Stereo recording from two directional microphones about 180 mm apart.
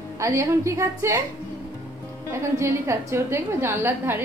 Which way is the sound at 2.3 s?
15° right (ahead or behind).